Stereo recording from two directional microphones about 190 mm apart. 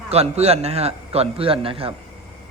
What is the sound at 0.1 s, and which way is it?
A man's voice, 35° right (ahead or behind).